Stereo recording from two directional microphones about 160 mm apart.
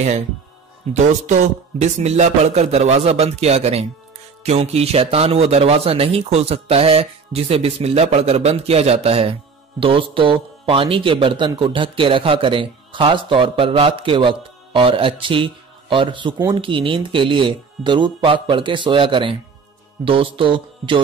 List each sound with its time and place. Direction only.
0.8 s a man's voice: 45° right (ahead or behind)